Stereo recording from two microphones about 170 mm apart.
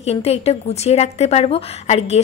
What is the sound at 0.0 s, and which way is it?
A woman's voice, 35° left (ahead or behind).